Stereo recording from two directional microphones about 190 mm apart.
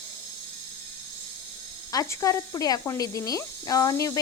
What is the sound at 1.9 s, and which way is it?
Speech, 15° left (ahead or behind).